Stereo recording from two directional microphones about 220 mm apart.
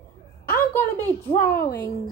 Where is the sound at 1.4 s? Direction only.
45° left (ahead or behind).